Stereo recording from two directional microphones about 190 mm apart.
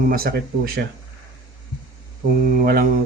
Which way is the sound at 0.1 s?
50° right (ahead or behind).